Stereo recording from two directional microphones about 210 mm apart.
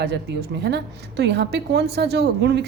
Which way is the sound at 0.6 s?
55° right (ahead or behind).